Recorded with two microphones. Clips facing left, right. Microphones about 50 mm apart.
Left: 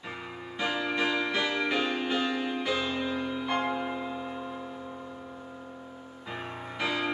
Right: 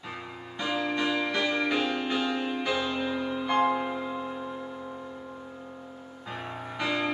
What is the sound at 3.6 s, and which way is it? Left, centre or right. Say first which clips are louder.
Music: right 5 dB; centre.